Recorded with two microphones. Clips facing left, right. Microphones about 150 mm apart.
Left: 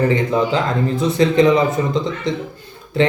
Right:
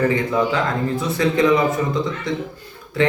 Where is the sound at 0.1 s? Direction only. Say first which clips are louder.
Left 2 dB; 20° left (ahead or behind).